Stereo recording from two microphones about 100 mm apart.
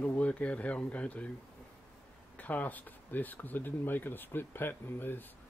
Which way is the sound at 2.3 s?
15° left (ahead or behind).